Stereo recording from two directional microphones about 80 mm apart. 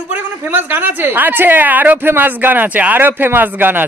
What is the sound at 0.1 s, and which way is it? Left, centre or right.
A woman's voice, right.